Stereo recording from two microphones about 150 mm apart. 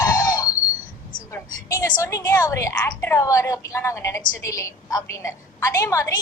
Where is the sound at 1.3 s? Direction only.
20° left (ahead or behind).